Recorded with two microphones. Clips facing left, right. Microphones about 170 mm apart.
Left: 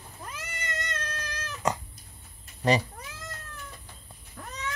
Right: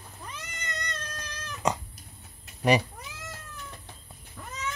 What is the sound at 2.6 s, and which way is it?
Cat, 10° right (ahead or behind).